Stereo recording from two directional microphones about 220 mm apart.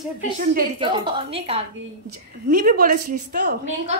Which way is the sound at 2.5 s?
40° right (ahead or behind).